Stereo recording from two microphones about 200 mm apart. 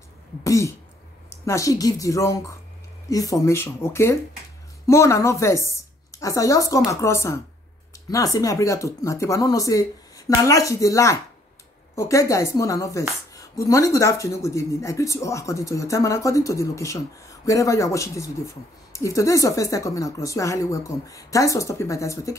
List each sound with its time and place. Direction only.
0.4 s a woman's voice: 15° left (ahead or behind)